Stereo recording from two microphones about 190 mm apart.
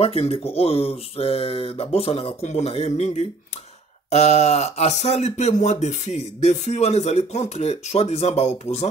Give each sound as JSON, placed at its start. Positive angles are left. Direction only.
{"t": 0.0, "sound": "speech", "side_deg": 30}